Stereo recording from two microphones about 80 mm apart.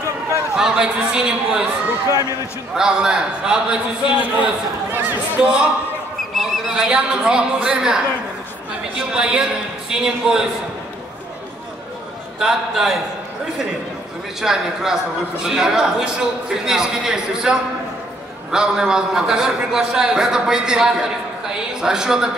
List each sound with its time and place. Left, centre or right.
0.6 s a man's voice: centre
2.0 s speech: right
2.7 s a man's voice: centre
9.1 s a man's voice: centre
12.4 s a man's voice: centre
14.4 s a man's voice: centre